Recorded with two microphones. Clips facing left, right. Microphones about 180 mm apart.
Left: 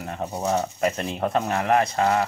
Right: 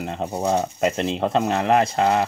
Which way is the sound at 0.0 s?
25° right (ahead or behind).